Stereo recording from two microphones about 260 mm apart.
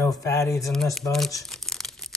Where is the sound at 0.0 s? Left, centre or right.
Centre.